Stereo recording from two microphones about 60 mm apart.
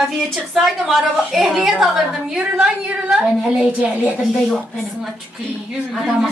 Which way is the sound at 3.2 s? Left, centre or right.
Right.